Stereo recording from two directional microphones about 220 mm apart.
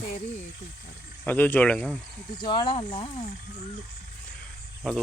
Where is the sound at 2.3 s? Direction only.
20° left (ahead or behind).